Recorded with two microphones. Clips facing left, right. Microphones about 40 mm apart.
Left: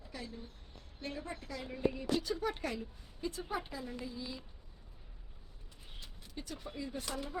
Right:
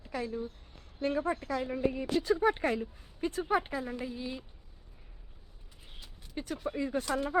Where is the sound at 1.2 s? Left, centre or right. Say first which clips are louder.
Right 11 dB; right.